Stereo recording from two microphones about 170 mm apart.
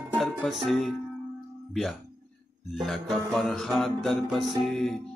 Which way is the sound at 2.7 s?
Centre (ahead or behind).